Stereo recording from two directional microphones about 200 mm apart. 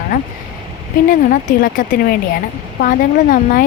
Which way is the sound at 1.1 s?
45° left (ahead or behind).